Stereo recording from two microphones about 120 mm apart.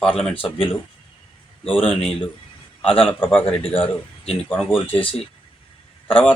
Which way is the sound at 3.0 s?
15° left (ahead or behind).